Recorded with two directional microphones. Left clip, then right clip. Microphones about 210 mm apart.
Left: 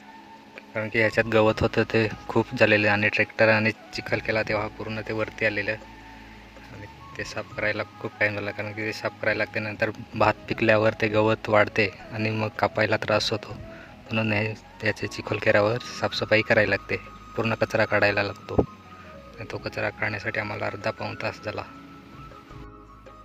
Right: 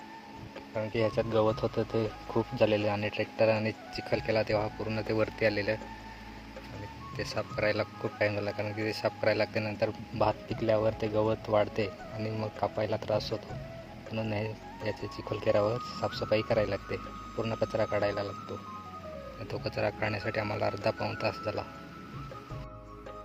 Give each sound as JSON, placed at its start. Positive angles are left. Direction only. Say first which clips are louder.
{"t": 0.8, "sound": "speech", "louder": "left 7 dB", "side_deg": 15}
{"t": 7.2, "sound": "speech", "louder": "left 2 dB", "side_deg": 5}
{"t": 19.5, "sound": "speech", "louder": "left 3 dB", "side_deg": 10}